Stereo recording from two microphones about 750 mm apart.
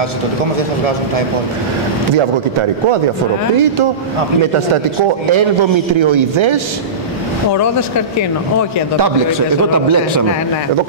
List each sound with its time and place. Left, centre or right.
5.3 s speech: right